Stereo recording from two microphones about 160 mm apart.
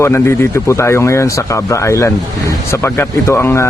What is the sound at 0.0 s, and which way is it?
A man's voice, 15° left (ahead or behind).